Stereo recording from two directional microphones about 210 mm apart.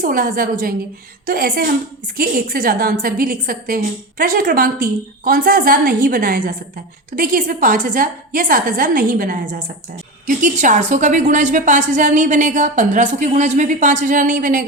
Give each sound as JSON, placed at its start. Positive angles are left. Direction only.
{"t": 0.0, "sound": "a woman's voice", "side_deg": -40}